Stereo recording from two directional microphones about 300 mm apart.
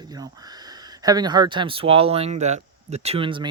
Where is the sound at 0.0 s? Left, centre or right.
Centre.